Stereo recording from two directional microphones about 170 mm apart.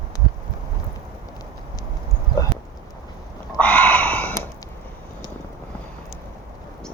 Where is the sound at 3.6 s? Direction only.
10° left (ahead or behind).